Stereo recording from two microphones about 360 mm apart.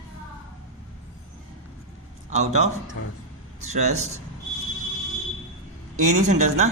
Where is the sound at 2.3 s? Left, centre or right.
Centre.